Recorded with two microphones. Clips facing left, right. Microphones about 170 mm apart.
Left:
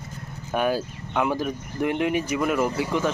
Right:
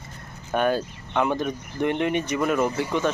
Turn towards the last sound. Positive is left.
turn(degrees=5)  # may be behind; listen again after turning